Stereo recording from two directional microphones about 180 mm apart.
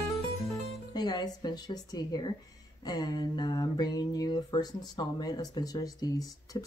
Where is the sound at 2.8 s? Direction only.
25° left (ahead or behind).